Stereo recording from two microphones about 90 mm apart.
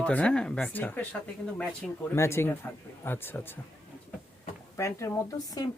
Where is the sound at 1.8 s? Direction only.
Centre (ahead or behind).